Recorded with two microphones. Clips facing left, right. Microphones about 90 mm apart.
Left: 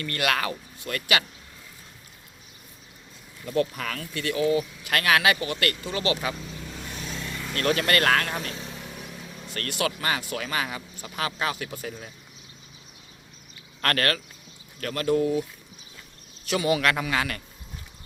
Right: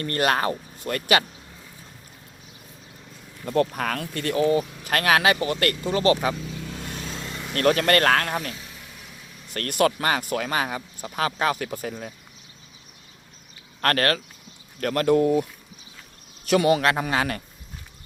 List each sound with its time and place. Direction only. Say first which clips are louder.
0.0 s speech: right 4 dB; 35° right (ahead or behind)
3.4 s speech: right 3 dB; 45° right (ahead or behind)
7.1 s vehicle: even; 35° right (ahead or behind)
7.5 s speech: right 4 dB; 40° right (ahead or behind)
8.4 s vehicle: left 1 dB; 30° left (ahead or behind)
9.5 s speech: right 7 dB; 45° right (ahead or behind)
13.8 s speech: right 3 dB; 35° right (ahead or behind)
14.8 s speech: right 4 dB; 45° right (ahead or behind)
16.5 s speech: right 5 dB; 45° right (ahead or behind)
16.8 s speech: right 2 dB; 30° right (ahead or behind)